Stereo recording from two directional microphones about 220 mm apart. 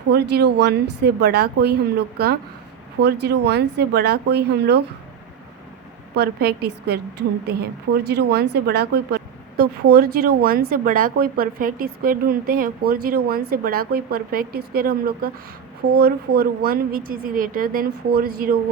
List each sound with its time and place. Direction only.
0.1 s speech: 45° right (ahead or behind)
6.1 s a woman's voice: 45° right (ahead or behind)